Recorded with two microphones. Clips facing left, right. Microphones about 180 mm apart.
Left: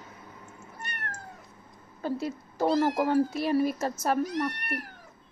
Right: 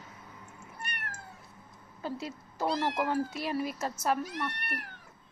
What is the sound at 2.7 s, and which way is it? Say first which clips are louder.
Speech: left 7 dB; 40° left (ahead or behind).